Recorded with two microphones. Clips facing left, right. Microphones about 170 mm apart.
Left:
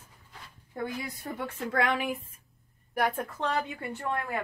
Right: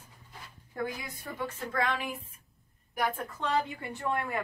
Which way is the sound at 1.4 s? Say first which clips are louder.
Left 3 dB; 75° left (ahead or behind).